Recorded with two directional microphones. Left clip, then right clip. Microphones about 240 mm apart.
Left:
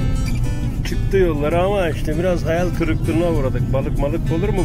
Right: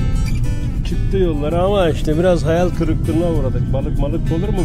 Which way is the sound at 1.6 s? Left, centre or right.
Right.